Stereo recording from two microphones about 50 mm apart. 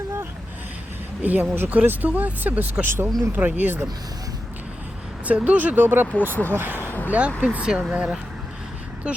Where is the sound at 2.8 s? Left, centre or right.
Right.